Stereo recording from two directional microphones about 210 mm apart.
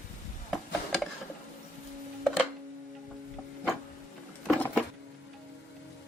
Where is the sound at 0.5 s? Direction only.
Centre (ahead or behind).